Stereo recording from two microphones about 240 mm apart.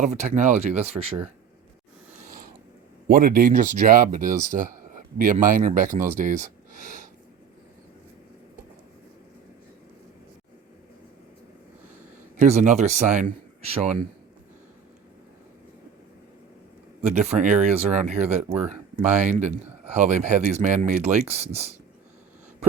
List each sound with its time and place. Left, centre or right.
0.0 s speech: right
2.1 s a sound: right
3.1 s speech: right
12.4 s speech: right
17.0 s speech: right